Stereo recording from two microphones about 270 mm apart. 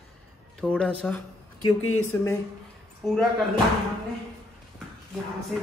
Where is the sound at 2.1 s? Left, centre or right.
Centre.